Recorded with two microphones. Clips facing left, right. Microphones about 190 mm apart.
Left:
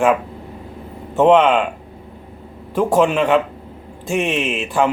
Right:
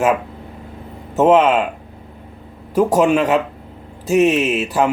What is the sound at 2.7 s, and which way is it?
Speech, 40° right (ahead or behind).